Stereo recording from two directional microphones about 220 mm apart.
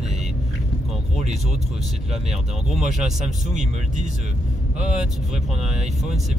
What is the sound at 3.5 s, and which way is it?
Speech, 35° right (ahead or behind).